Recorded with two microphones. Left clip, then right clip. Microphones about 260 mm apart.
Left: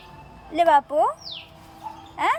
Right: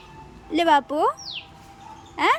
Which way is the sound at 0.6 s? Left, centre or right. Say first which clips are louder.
Left 1 dB; centre.